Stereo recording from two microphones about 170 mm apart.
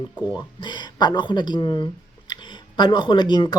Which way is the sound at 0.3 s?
25° left (ahead or behind).